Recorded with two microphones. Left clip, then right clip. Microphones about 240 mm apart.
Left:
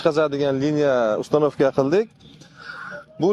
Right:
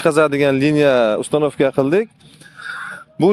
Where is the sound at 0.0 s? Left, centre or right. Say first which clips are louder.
Right 5 dB; right.